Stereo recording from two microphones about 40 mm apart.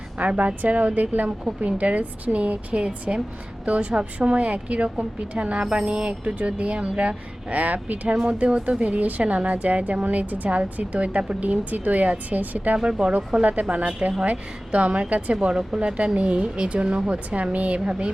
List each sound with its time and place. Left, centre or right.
0.2 s a woman's voice: right
8.1 s speech: right
8.8 s a woman's voice: right
12.7 s speech: right
13.4 s a woman's voice: right
16.1 s a woman's voice: right